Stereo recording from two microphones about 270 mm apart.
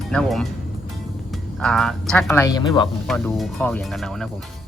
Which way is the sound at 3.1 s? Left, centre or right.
Centre.